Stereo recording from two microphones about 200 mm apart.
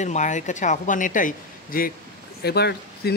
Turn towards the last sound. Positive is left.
turn(degrees=55)  # may be behind; listen again after turning